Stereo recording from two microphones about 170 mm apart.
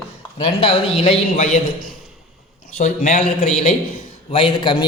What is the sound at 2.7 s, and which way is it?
Speech, 45° left (ahead or behind).